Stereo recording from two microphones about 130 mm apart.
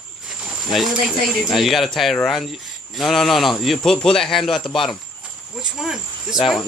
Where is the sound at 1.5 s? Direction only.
Centre (ahead or behind).